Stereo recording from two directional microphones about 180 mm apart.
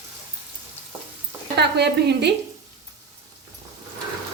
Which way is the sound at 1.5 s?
65° right (ahead or behind).